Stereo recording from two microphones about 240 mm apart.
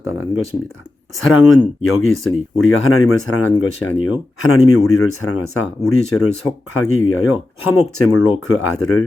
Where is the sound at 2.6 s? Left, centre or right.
Left.